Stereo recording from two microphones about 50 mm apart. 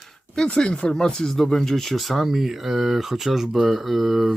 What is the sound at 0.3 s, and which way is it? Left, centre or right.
Speech, centre.